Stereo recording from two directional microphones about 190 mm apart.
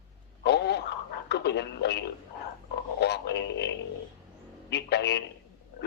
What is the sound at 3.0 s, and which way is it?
Speech, 60° left (ahead or behind).